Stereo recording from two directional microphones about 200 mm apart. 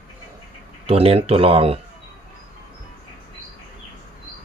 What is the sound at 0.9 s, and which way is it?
Speech, 30° right (ahead or behind).